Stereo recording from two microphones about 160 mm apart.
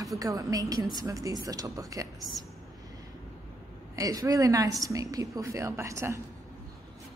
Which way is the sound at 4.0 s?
20° right (ahead or behind).